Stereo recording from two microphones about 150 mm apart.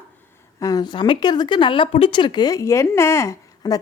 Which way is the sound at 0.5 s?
25° left (ahead or behind).